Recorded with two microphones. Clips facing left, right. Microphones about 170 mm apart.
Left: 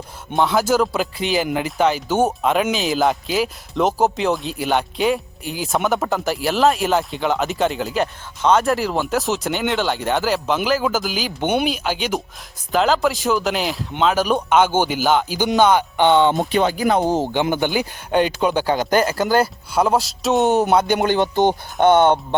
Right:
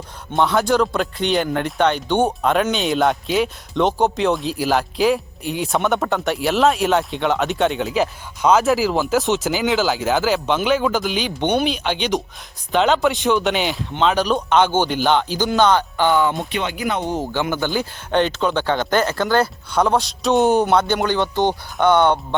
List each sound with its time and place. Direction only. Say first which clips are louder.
0.3 s a man's voice: even; centre (ahead or behind)
16.0 s speech: left 3 dB; 25° left (ahead or behind)
16.5 s speech: left 6 dB; 35° left (ahead or behind)
17.3 s speech: left 2 dB; 20° left (ahead or behind); by 20.7 s centre (ahead or behind)
20.7 s speech: left 1 dB; 15° left (ahead or behind)